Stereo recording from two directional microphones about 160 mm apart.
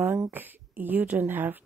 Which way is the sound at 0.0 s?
15° right (ahead or behind).